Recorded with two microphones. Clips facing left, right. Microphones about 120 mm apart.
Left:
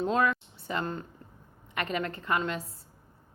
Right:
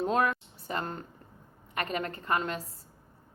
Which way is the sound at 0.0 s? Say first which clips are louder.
Left 1 dB; 40° right (ahead or behind).